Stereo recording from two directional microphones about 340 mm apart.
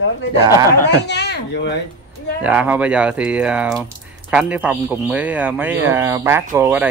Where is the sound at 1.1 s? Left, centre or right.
Left.